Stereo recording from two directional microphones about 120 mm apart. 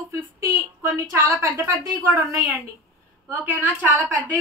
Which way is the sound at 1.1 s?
15° right (ahead or behind).